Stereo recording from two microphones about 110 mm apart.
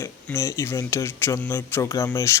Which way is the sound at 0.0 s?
25° left (ahead or behind).